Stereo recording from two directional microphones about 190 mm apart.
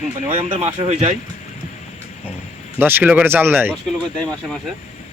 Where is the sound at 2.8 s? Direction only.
10° right (ahead or behind).